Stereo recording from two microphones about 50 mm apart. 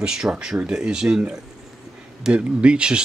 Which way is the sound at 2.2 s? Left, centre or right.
Centre.